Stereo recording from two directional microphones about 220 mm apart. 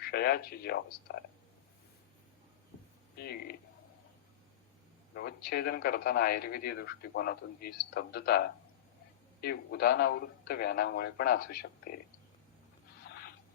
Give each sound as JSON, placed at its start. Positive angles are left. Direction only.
{"t": 0.0, "sound": "speech", "side_deg": 45}
{"t": 3.2, "sound": "speech", "side_deg": 45}
{"t": 5.1, "sound": "speech", "side_deg": 45}